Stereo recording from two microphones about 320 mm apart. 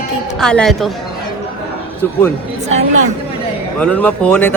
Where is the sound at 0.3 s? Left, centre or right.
Centre.